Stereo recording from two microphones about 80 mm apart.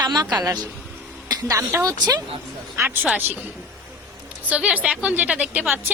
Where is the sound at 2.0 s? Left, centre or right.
Right.